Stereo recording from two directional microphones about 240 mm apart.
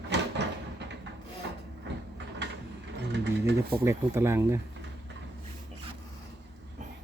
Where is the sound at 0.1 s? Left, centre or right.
Right.